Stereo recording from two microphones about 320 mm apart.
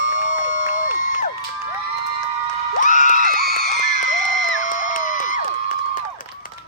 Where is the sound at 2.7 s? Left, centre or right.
Left.